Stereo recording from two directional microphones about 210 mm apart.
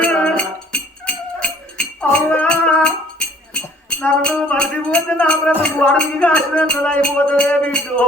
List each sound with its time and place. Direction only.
0.0 s music: 5° left (ahead or behind)
3.5 s speech: 5° left (ahead or behind)